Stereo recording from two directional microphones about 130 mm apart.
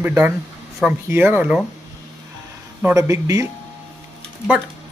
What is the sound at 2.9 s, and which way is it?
Speech, 25° right (ahead or behind).